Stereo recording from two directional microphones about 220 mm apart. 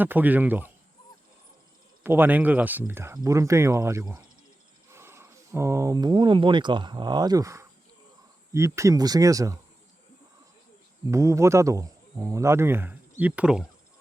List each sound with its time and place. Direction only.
0.0 s speech: 10° right (ahead or behind)
2.0 s speech: 10° right (ahead or behind)
11.1 s speech: 15° right (ahead or behind)